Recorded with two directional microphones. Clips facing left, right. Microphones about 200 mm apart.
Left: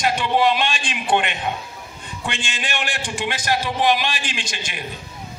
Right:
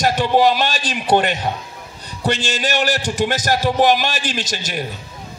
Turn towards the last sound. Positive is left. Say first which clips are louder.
# right 7 dB
turn(degrees=-40)  # may be behind; listen again after turning